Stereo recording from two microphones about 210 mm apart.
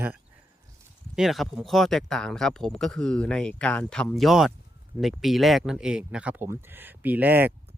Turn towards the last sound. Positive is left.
turn(degrees=-10)  # may be behind; listen again after turning